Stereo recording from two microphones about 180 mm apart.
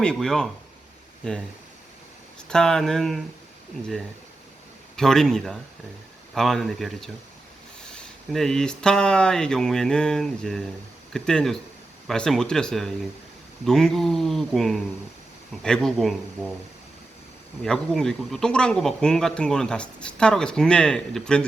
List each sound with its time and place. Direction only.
0.0 s speech: 5° left (ahead or behind)
2.5 s speech: 5° left (ahead or behind)
4.9 s speech: centre (ahead or behind)
17.6 s speech: 5° left (ahead or behind)